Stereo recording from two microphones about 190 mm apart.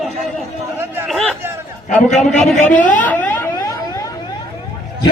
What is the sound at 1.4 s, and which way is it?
Chatter, 10° right (ahead or behind).